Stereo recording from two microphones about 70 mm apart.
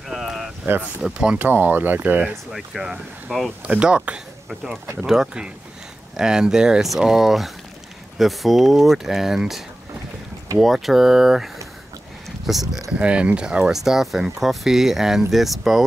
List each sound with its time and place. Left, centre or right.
0.1 s a sound: centre
0.9 s speech: centre
1.4 s speech: right
2.5 s speech: centre
3.6 s speech: centre
10.6 s speech: centre
13.0 s speech: centre